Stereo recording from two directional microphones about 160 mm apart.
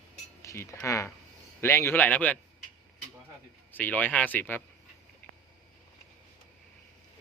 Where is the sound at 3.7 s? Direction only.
10° left (ahead or behind).